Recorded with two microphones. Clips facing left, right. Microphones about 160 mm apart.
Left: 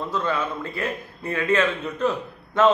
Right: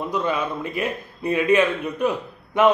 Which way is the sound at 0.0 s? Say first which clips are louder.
Right 2 dB; 15° right (ahead or behind).